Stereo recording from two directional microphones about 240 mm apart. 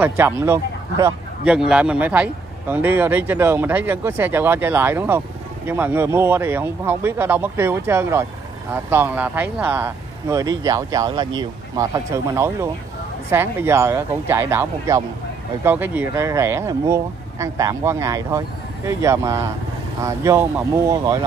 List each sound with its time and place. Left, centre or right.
0.0 s a man's voice: centre